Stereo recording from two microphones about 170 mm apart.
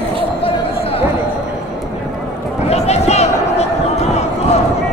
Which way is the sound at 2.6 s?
40° left (ahead or behind).